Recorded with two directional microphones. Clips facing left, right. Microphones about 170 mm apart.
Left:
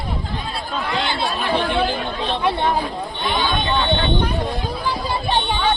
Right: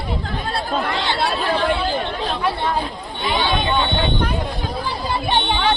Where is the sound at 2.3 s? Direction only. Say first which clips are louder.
Left 4 dB; 20° left (ahead or behind).